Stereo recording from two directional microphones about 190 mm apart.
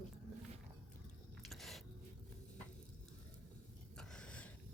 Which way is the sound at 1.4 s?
Centre (ahead or behind).